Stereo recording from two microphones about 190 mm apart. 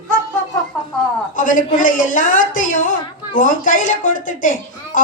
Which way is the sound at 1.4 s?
45° left (ahead or behind).